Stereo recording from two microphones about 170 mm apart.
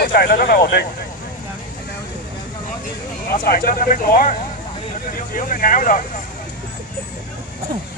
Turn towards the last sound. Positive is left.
turn(degrees=50)  # may be behind; listen again after turning